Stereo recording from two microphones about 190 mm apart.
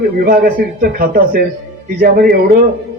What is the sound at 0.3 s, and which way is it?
A man's voice, 50° right (ahead or behind).